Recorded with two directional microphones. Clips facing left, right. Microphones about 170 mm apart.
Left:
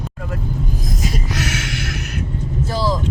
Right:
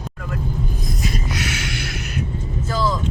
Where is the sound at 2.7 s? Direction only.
35° left (ahead or behind).